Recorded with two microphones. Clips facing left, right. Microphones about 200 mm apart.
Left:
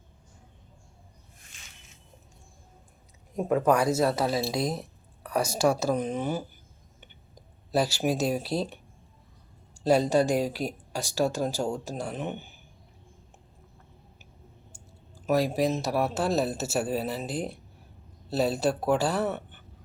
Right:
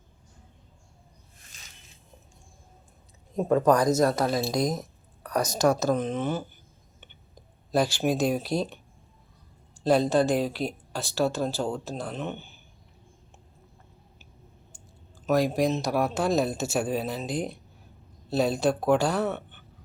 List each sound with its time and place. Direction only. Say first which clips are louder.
1.5 s a sound: right 1 dB; 35° right (ahead or behind)
3.3 s speech: right 2 dB; 10° left (ahead or behind)
7.7 s speech: right 1 dB; 5° left (ahead or behind)
9.7 s speech: even; 10° left (ahead or behind)
15.3 s speech: right 1 dB; 5° left (ahead or behind)